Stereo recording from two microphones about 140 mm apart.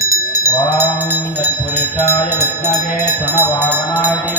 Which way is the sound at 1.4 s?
15° right (ahead or behind).